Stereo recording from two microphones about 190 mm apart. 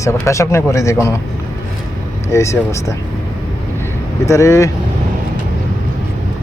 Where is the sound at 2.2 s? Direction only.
15° left (ahead or behind).